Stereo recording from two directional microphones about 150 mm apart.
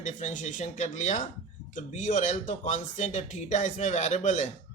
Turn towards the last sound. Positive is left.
turn(degrees=55)  # may be behind; listen again after turning